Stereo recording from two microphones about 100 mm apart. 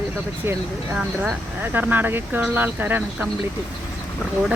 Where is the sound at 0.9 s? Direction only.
5° right (ahead or behind).